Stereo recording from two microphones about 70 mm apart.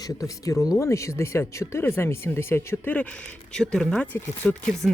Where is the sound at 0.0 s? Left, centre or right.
Left.